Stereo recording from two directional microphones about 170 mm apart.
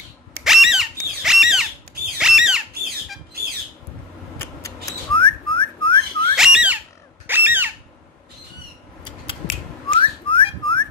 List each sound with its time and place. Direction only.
0.4 s a sound: centre (ahead or behind)
1.2 s squawk: centre (ahead or behind)
5.1 s whistling: 30° left (ahead or behind)
6.3 s bird: 5° right (ahead or behind)
7.2 s a sound: 10° right (ahead or behind)
9.0 s scissors: 30° left (ahead or behind)
9.9 s whistling: 30° left (ahead or behind)